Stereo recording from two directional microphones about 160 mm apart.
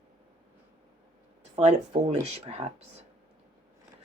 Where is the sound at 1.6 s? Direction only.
40° right (ahead or behind).